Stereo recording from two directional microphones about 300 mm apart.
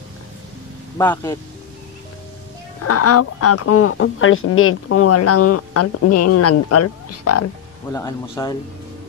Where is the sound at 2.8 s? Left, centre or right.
Left.